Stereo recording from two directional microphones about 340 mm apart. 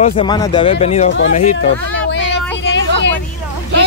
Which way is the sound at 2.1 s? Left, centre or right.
Left.